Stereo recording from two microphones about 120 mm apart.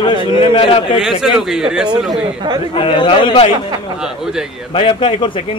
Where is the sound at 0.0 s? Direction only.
45° left (ahead or behind).